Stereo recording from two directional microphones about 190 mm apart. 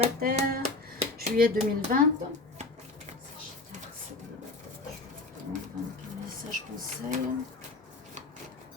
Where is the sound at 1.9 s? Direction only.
45° right (ahead or behind).